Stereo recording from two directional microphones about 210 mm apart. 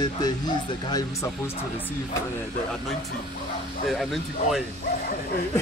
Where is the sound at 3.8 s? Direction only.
Centre (ahead or behind).